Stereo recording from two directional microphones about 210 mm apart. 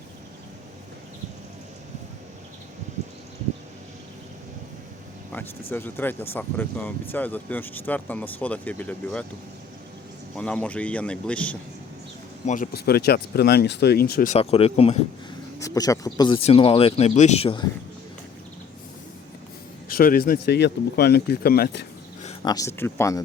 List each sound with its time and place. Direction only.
5.7 s speech: 10° left (ahead or behind)
10.3 s speech: 5° left (ahead or behind)
12.5 s speech: 45° left (ahead or behind)
14.3 s speech: 30° left (ahead or behind)
15.5 s speech: 15° left (ahead or behind)
19.9 s speech: 45° left (ahead or behind)
22.4 s speech: 15° left (ahead or behind)